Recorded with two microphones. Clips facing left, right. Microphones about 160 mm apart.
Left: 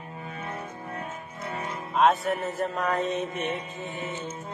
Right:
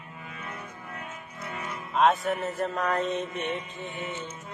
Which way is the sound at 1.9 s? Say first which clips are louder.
Left 1 dB; centre (ahead or behind).